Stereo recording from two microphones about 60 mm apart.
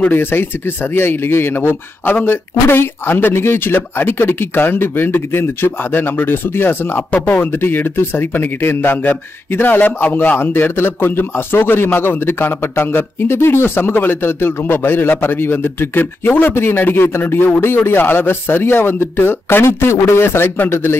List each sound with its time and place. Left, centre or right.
0.0 s a man's voice: left